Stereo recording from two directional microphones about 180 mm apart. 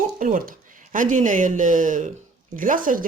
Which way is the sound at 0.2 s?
50° right (ahead or behind).